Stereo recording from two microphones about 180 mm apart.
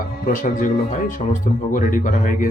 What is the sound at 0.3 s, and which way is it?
Speech, 45° left (ahead or behind).